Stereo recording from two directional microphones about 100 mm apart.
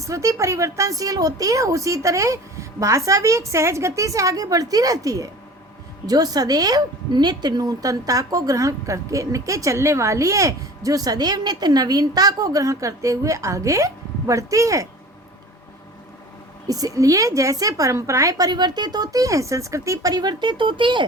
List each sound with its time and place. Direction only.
0.0 s a woman's voice: 30° right (ahead or behind)
16.6 s a woman's voice: 35° right (ahead or behind); by 21.0 s 55° right (ahead or behind)